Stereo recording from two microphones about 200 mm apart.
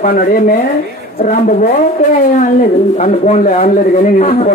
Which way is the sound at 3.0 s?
35° left (ahead or behind).